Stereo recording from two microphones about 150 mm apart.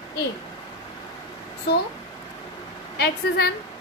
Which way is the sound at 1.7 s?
90° left.